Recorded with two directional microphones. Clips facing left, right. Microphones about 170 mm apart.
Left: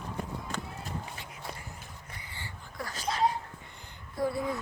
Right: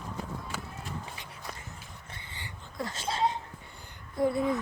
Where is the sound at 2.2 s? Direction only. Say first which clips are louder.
Even; 20° right (ahead or behind).